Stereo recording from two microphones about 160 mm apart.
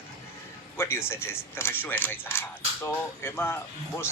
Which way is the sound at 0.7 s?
15° left (ahead or behind).